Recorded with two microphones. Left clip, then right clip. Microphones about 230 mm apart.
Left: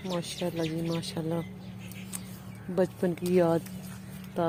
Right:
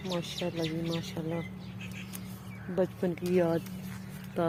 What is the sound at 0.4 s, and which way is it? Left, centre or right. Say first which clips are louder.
Speech: left 4 dB; centre.